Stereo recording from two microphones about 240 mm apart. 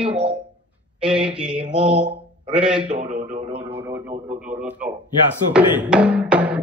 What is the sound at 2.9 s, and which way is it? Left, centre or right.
Speech, right.